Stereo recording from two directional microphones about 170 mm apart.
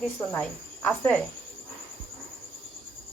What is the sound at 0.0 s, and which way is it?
Speech, 10° left (ahead or behind).